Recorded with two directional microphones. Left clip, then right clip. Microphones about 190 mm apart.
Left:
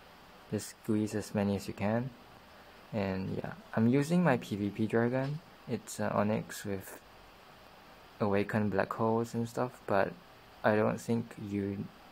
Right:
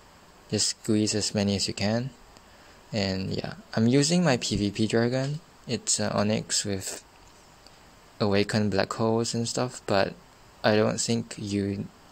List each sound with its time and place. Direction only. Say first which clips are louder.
0.5 s speech: right 9 dB; 20° right (ahead or behind)
8.2 s speech: right 6 dB; 25° right (ahead or behind)